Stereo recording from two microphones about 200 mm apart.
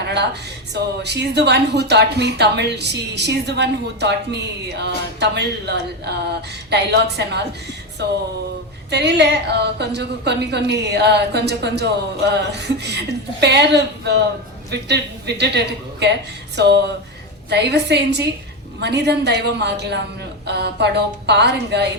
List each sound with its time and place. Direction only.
0.7 s a woman's voice: 60° right (ahead or behind)
8.9 s a woman's voice: 55° right (ahead or behind)